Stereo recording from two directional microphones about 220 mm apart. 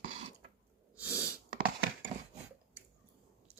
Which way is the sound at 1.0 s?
5° right (ahead or behind).